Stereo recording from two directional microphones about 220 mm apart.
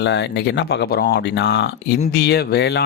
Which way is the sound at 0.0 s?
50° left (ahead or behind).